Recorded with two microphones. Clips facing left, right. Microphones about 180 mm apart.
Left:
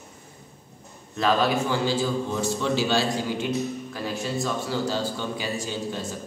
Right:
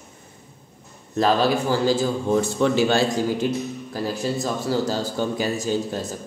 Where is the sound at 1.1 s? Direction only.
35° right (ahead or behind).